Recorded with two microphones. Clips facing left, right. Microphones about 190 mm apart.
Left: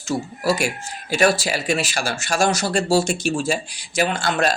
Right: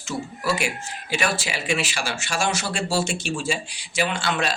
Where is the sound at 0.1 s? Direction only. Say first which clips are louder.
Left 5 dB; 40° left (ahead or behind).